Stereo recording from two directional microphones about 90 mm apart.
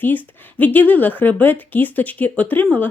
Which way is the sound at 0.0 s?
20° left (ahead or behind).